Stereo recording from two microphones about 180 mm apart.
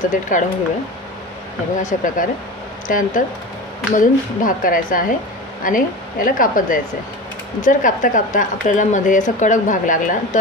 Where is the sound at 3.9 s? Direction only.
50° left (ahead or behind).